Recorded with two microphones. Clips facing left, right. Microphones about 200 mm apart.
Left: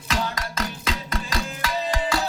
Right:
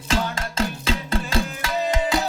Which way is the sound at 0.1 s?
30° right (ahead or behind).